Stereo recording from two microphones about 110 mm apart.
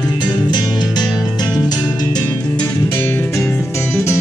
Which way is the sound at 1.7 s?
40° left (ahead or behind).